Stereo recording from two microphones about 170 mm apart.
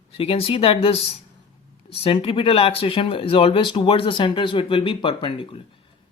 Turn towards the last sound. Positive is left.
turn(degrees=30)  # may be behind; listen again after turning